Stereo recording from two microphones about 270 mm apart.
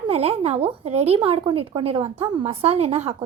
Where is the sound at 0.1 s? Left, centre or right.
Right.